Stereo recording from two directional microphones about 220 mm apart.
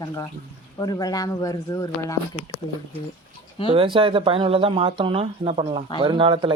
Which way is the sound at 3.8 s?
25° right (ahead or behind).